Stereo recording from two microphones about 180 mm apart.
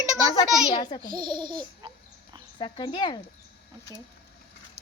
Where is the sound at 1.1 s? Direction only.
25° right (ahead or behind).